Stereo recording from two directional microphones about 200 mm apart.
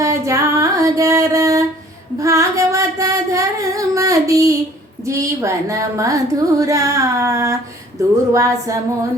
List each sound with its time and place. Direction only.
0.0 s a sound: 15° right (ahead or behind)
2.1 s singing: 15° right (ahead or behind)
5.0 s speech: 15° right (ahead or behind)